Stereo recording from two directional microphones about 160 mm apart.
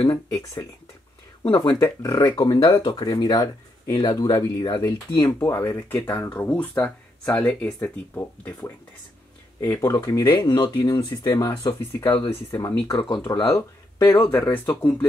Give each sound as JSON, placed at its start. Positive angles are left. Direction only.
{"t": 0.0, "sound": "speech", "side_deg": 20}
{"t": 12.9, "sound": "speech", "side_deg": 35}